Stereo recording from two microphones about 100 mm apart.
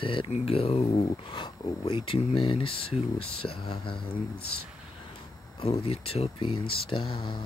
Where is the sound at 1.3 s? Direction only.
55° left (ahead or behind).